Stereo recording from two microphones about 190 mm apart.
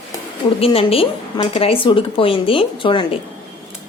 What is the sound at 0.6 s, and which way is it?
Speech, 30° left (ahead or behind).